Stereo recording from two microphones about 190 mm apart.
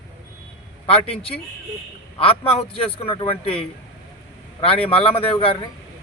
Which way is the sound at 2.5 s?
30° left (ahead or behind).